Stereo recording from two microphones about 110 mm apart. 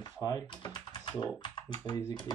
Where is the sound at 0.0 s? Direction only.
35° left (ahead or behind).